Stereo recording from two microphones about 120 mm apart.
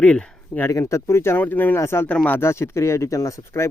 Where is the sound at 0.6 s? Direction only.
25° left (ahead or behind).